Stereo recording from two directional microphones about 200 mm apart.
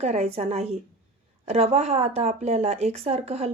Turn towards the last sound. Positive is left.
turn(degrees=-30)  # may be behind; listen again after turning